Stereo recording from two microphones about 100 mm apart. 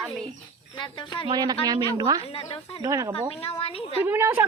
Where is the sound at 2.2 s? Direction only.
80° left.